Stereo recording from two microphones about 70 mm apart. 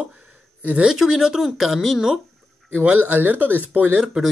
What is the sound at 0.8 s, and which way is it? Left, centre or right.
Speech, centre.